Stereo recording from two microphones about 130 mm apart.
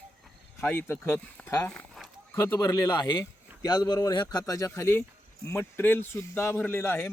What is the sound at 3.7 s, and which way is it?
Speech, 30° left (ahead or behind).